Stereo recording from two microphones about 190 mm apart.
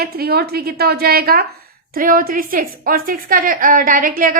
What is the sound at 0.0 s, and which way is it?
A woman's voice, 55° right (ahead or behind).